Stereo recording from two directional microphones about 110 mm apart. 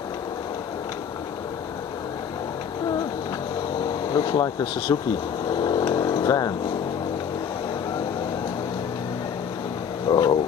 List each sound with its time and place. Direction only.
4.1 s speech: 40° left (ahead or behind)
5.5 s vehicle: 40° left (ahead or behind)
10.0 s a sound: 45° left (ahead or behind)